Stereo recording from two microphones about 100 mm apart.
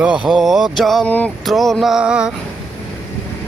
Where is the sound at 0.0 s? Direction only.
10° right (ahead or behind).